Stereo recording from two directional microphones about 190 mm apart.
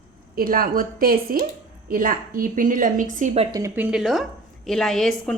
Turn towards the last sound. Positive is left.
turn(degrees=0)  # may be behind; listen again after turning